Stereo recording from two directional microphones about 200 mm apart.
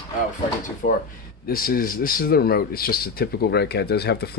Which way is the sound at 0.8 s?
45° left (ahead or behind).